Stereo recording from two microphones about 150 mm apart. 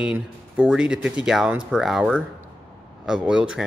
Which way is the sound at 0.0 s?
5° right (ahead or behind).